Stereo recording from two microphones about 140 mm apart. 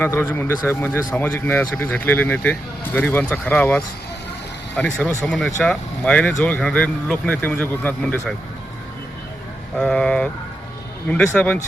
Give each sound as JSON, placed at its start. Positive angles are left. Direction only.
{"t": 0.0, "sound": "speech", "side_deg": 15}
{"t": 9.7, "sound": "speech", "side_deg": 5}